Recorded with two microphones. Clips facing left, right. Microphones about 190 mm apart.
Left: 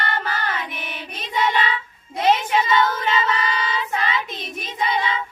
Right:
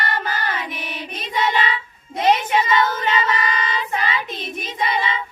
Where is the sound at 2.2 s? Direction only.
15° right (ahead or behind).